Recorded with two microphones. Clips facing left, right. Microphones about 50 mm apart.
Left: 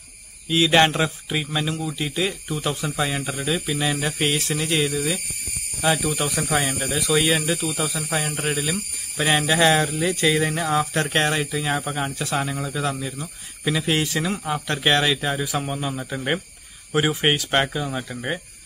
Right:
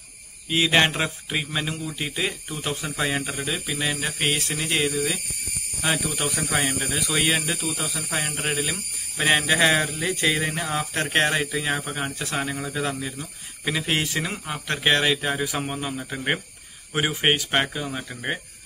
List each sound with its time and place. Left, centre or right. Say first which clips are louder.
0.5 s speech: left 3 dB; centre
3.3 s speech: left 4 dB; centre
14.4 s speech: left 2 dB; centre
16.9 s speech: left 2 dB; centre